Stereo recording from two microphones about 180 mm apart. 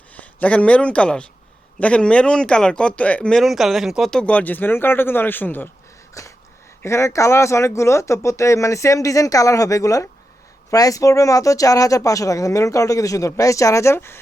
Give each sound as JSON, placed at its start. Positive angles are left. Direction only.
{"t": 0.2, "sound": "a man's voice", "side_deg": 10}
{"t": 6.2, "sound": "a sound", "side_deg": 15}
{"t": 6.8, "sound": "speech", "side_deg": 15}